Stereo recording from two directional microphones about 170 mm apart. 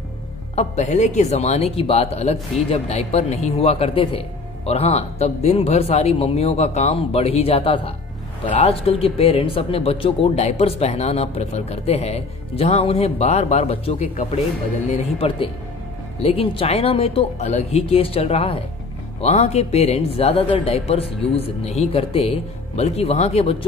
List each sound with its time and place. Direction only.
0.6 s speech: 40° left (ahead or behind)